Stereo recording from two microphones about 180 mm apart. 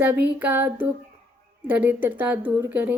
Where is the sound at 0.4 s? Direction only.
10° right (ahead or behind).